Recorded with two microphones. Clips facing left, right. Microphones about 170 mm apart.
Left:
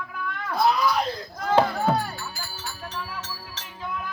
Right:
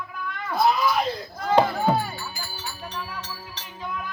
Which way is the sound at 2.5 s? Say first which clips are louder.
Right 1 dB; 5° right (ahead or behind).